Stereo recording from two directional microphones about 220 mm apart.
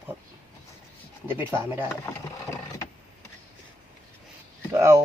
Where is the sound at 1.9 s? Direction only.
15° left (ahead or behind).